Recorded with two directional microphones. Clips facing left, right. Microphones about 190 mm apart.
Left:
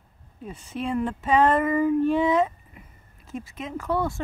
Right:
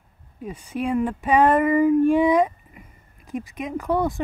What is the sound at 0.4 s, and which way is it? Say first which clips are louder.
Speech: right 4 dB; 10° right (ahead or behind).